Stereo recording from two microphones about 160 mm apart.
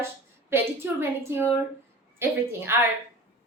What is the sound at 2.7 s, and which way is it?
Speech, 15° right (ahead or behind).